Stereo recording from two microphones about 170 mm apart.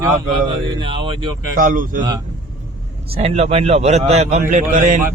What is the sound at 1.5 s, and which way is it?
Speech, 50° right (ahead or behind).